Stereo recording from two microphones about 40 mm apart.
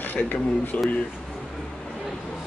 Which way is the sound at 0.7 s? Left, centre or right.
Left.